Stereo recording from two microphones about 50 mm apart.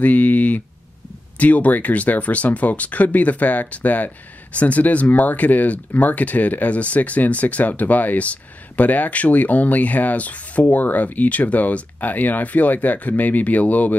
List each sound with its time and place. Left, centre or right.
0.0 s speech: left